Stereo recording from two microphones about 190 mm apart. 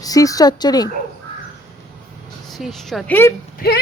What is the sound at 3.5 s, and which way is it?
Speech, 55° left (ahead or behind).